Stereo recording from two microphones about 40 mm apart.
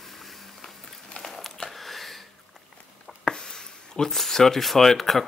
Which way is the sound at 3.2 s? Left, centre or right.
Centre.